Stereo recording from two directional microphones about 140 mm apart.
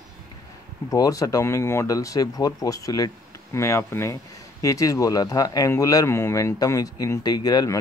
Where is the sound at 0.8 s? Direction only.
25° left (ahead or behind).